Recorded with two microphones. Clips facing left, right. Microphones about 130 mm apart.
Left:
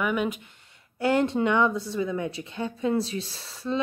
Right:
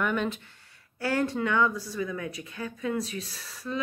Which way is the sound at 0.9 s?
20° left (ahead or behind).